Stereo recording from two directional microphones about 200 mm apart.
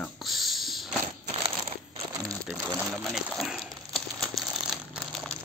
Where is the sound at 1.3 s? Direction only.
30° right (ahead or behind).